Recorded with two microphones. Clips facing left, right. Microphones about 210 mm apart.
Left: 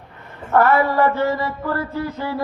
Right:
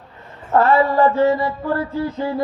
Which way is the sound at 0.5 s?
30° right (ahead or behind).